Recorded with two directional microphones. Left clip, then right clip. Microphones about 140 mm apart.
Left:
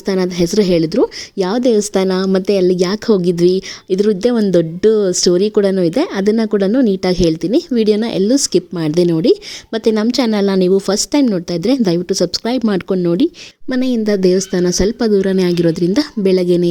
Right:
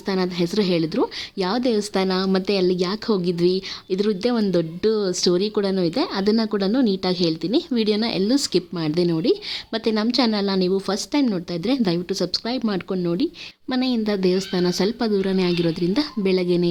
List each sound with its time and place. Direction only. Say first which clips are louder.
0.0 s speech: left 7 dB; 40° left (ahead or behind)
7.7 s speech: left 7 dB; 30° left (ahead or behind)
13.7 s speech: left 7 dB; 35° left (ahead or behind)